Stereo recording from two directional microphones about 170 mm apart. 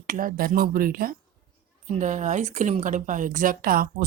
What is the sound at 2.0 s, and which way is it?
A woman's voice, 45° right (ahead or behind).